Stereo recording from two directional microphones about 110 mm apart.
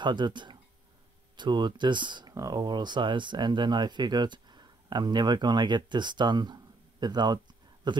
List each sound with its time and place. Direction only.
0.0 s speech: 45° right (ahead or behind)